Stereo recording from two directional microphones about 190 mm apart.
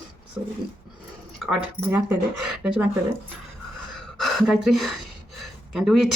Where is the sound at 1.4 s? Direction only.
5° right (ahead or behind).